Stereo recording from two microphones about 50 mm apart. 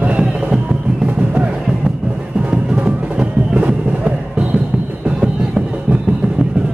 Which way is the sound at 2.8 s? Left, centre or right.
Right.